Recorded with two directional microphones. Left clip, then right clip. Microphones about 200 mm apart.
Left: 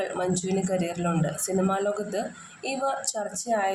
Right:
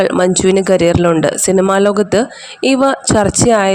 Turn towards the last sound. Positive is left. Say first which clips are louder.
# right 15 dB
turn(degrees=-55)  # may be behind; listen again after turning